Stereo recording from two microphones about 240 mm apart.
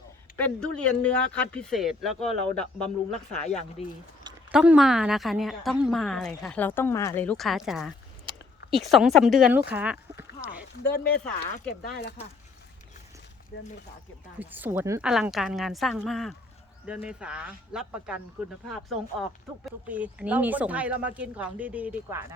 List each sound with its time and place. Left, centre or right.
0.3 s a woman's voice: centre
3.4 s speech: left
4.5 s a woman's voice: centre
10.9 s speech: left
13.5 s speech: left
14.3 s a woman's voice: centre
19.6 s a woman's voice: centre